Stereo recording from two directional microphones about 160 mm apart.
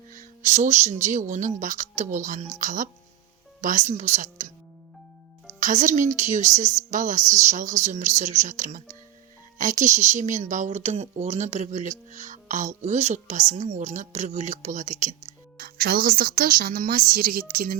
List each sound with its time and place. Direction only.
0.1 s music: 55° right (ahead or behind)
1.0 s speech: 50° right (ahead or behind)
5.5 s speech: 55° right (ahead or behind)
15.5 s speech: 80° right; by 17.7 s 65° right (ahead or behind)